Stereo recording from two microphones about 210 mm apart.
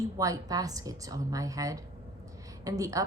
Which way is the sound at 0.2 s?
15° right (ahead or behind).